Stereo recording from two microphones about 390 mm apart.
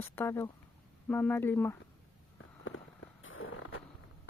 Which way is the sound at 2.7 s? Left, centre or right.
Left.